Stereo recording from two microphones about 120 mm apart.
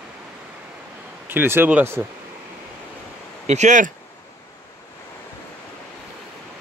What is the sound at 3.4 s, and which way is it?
Speech, 75° right (ahead or behind).